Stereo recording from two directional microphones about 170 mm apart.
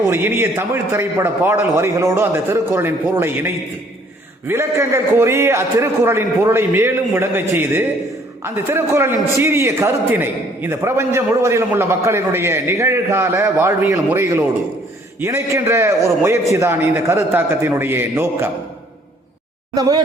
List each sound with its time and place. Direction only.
0.1 s a man's voice: 15° right (ahead or behind)
19.7 s speech: 20° right (ahead or behind)